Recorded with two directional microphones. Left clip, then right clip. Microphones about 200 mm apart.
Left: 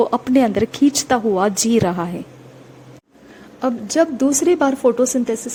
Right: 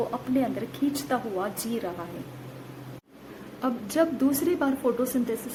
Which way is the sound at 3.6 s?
25° left (ahead or behind).